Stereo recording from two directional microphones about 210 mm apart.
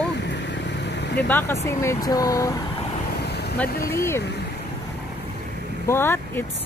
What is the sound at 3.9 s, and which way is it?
Speech, 10° left (ahead or behind).